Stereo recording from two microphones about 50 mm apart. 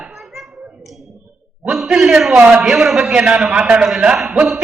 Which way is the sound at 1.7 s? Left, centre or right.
Centre.